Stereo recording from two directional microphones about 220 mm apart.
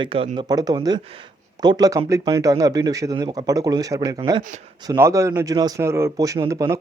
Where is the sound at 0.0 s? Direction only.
25° right (ahead or behind).